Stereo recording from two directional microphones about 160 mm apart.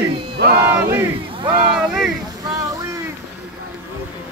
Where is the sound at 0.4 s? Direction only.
75° right (ahead or behind).